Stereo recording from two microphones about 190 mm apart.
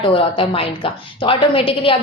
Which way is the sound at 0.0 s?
30° left (ahead or behind).